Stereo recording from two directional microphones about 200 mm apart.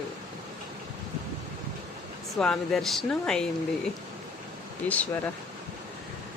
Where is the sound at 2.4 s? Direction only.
5° left (ahead or behind).